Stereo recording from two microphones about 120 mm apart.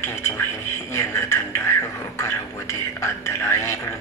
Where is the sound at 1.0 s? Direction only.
20° left (ahead or behind).